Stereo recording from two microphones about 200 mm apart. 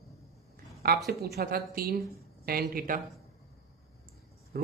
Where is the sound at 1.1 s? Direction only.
50° right (ahead or behind).